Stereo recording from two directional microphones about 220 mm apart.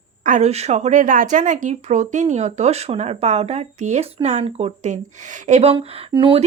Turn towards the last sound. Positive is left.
turn(degrees=-25)  # may be behind; listen again after turning